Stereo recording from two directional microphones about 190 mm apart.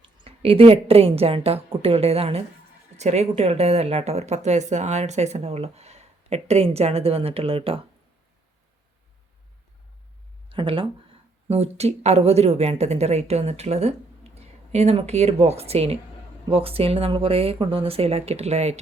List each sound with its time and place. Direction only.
0.3 s a woman's voice: 30° right (ahead or behind)
10.5 s a woman's voice: 30° right (ahead or behind)